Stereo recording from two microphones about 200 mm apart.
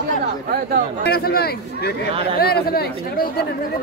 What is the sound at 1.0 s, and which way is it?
A man's voice, 50° left (ahead or behind).